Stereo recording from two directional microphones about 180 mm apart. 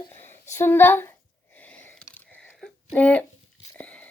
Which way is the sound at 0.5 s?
10° left (ahead or behind).